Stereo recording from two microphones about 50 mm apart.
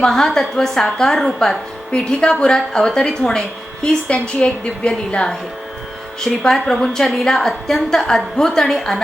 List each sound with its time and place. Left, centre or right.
0.0 s a woman's voice: centre